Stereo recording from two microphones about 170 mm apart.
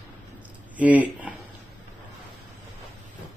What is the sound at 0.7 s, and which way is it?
Speech, 10° right (ahead or behind).